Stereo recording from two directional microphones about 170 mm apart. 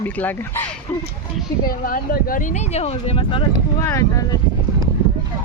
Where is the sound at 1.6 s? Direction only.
60° left (ahead or behind); by 3.4 s 30° left (ahead or behind).